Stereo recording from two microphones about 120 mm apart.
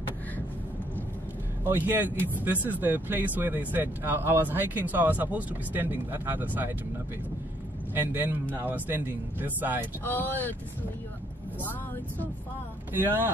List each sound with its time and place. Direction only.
1.6 s speech: 15° right (ahead or behind)
7.9 s speech: 15° right (ahead or behind)
10.0 s speech: 15° left (ahead or behind)